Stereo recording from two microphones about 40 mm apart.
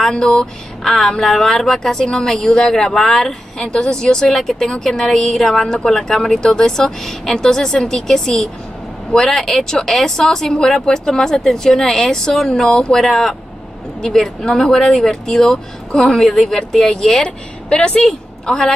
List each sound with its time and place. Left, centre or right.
0.1 s a woman's voice: left
0.8 s speech: centre
3.6 s a woman's voice: centre
4.3 s speech: centre
7.0 s speech: centre
12.6 s a woman's voice: left
12.9 s speech: centre
14.8 s a woman's voice: centre
17.6 s a woman's voice: left
18.4 s a woman's voice: centre